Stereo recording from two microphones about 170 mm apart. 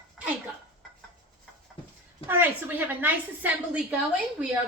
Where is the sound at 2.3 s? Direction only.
10° right (ahead or behind).